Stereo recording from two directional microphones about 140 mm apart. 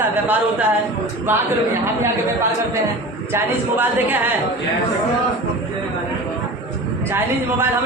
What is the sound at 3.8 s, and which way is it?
Speech, 15° right (ahead or behind).